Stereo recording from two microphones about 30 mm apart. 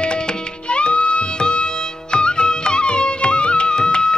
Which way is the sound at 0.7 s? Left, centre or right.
Left.